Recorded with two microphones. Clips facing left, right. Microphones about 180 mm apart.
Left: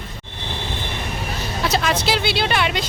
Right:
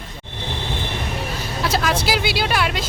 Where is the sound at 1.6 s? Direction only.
Centre (ahead or behind).